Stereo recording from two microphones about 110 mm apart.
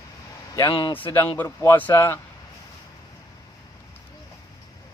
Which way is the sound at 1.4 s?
25° left (ahead or behind).